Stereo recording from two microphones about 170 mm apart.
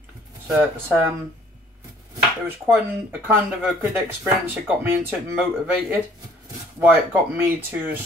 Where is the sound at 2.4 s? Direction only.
15° right (ahead or behind).